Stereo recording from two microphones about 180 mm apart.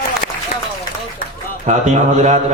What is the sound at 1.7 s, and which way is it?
Speech, 40° right (ahead or behind).